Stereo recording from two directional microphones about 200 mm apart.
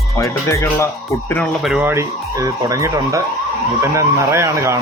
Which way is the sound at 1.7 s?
10° right (ahead or behind).